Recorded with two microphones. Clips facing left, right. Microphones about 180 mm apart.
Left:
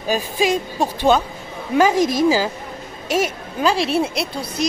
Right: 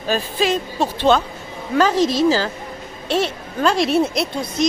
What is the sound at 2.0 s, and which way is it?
Speech, 50° left (ahead or behind).